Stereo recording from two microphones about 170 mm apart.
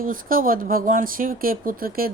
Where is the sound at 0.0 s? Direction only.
55° right (ahead or behind).